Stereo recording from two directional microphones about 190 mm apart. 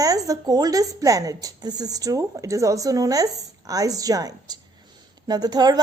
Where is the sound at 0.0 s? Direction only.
20° right (ahead or behind).